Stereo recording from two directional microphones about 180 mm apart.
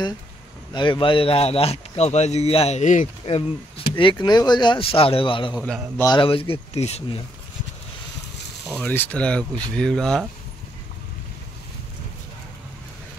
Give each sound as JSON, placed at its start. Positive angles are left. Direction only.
{"t": 0.7, "sound": "speech", "side_deg": 25}
{"t": 8.6, "sound": "speech", "side_deg": 5}